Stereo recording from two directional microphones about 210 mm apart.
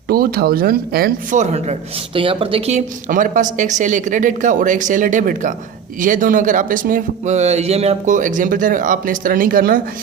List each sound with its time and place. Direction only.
0.1 s speech: 45° right (ahead or behind)
1.4 s a man's voice: 30° right (ahead or behind)